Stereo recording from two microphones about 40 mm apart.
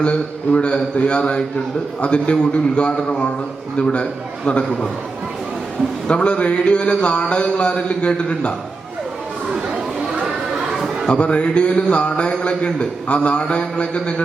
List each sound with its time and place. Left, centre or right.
0.0 s a man's voice: left
6.1 s a man's voice: left
9.6 s chatter: right
10.2 s a sound: centre
11.1 s a man's voice: left